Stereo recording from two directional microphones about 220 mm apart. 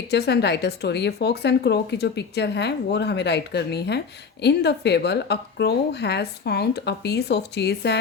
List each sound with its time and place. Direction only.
0.1 s speech: 50° left (ahead or behind)